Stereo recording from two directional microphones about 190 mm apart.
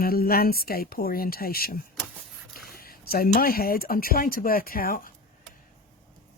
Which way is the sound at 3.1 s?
50° left (ahead or behind).